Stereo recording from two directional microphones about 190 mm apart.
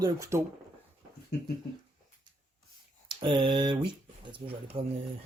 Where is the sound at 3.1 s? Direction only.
25° right (ahead or behind).